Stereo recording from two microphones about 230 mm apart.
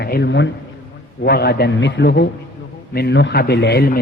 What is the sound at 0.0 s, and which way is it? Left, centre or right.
A man's voice, left.